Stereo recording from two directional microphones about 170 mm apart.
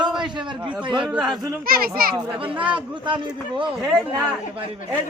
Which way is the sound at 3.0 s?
30° right (ahead or behind).